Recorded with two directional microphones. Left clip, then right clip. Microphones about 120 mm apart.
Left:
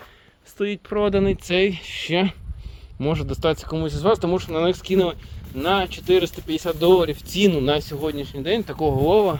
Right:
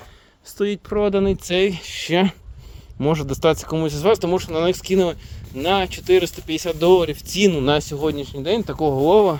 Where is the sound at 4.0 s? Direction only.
90° right.